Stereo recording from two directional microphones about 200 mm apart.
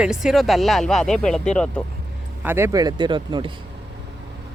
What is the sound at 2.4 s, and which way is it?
Speech, 10° right (ahead or behind).